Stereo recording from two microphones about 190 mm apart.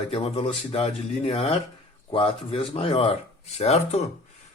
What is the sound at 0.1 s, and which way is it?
Speech, 30° left (ahead or behind).